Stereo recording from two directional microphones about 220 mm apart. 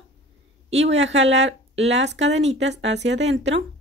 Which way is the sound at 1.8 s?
55° right (ahead or behind).